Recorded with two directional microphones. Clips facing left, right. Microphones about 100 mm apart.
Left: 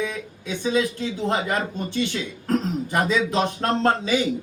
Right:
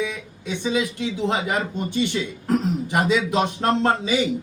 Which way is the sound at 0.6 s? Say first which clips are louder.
Left 1 dB; 15° right (ahead or behind).